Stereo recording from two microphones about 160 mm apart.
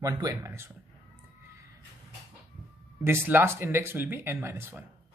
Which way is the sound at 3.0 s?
15° right (ahead or behind).